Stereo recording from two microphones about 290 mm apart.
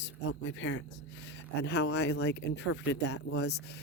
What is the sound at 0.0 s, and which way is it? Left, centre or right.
Speech, left.